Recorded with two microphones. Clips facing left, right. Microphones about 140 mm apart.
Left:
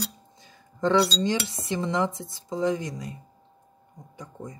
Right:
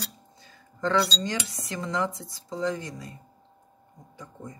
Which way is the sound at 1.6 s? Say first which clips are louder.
Left 3 dB; 25° left (ahead or behind).